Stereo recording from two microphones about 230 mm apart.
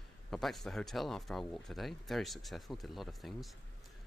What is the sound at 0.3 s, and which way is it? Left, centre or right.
Speech, centre.